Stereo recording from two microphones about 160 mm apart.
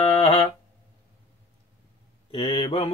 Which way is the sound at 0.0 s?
40° left (ahead or behind).